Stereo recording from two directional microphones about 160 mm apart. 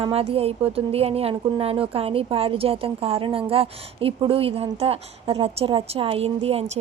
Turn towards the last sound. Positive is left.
turn(degrees=-40)  # may be behind; listen again after turning